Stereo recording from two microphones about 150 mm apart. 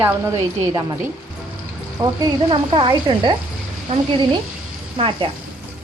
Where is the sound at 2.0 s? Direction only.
30° right (ahead or behind).